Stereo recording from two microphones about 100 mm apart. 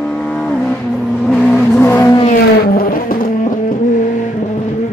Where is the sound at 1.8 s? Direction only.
25° left (ahead or behind).